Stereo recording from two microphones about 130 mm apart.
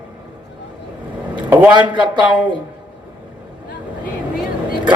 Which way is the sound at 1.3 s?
10° right (ahead or behind).